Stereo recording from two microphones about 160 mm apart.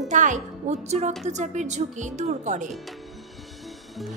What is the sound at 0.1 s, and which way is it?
A woman's voice, 50° right (ahead or behind).